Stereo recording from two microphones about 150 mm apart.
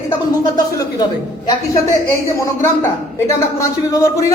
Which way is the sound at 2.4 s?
20° left (ahead or behind).